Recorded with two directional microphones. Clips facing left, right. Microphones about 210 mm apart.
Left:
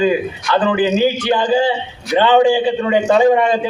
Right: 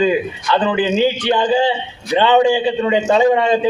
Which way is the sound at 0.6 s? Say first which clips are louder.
Left 3 dB; 25° right (ahead or behind).